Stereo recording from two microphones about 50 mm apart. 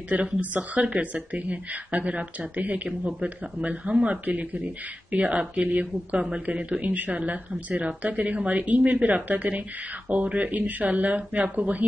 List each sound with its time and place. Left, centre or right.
0.1 s speech: right